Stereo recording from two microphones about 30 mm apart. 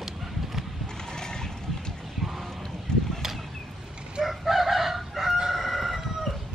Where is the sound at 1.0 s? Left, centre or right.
Left.